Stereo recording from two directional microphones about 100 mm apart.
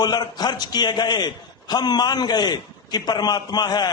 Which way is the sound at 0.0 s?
45° left (ahead or behind).